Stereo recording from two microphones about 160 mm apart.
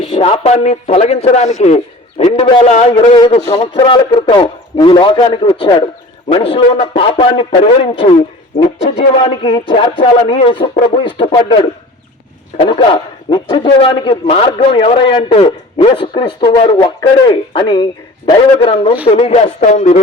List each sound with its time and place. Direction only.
0.0 s a man's voice: 35° left (ahead or behind)
2.3 s a man's voice: 30° left (ahead or behind)
13.3 s a man's voice: 35° left (ahead or behind)